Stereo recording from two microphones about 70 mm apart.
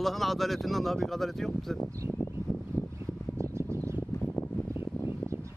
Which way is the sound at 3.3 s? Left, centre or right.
Right.